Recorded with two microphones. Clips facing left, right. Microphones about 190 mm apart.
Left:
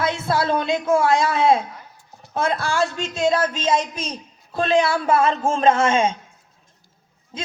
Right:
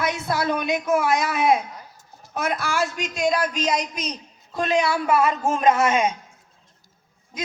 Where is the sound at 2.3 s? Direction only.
30° left (ahead or behind).